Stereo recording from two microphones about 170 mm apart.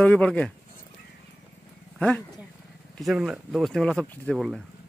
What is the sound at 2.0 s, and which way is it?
Speech, 5° left (ahead or behind).